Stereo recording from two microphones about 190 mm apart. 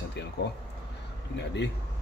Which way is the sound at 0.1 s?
60° left (ahead or behind).